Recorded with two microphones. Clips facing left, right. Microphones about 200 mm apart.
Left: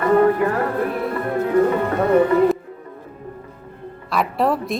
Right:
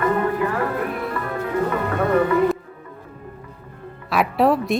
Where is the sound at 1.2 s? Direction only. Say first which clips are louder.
Left 5 dB; 35° left (ahead or behind).